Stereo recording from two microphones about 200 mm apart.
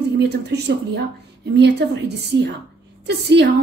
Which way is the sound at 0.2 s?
55° right (ahead or behind).